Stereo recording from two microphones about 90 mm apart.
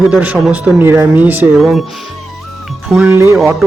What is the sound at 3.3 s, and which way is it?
Music, centre (ahead or behind).